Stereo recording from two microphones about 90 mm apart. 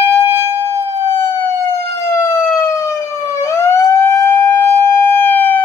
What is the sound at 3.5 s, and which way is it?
Siren, 30° left (ahead or behind).